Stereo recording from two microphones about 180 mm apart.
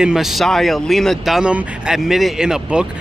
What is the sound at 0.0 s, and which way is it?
Speech, centre (ahead or behind).